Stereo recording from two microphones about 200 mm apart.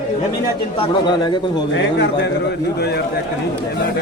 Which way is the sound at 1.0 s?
25° left (ahead or behind).